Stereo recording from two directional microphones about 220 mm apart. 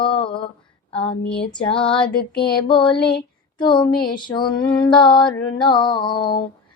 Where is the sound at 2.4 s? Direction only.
20° left (ahead or behind).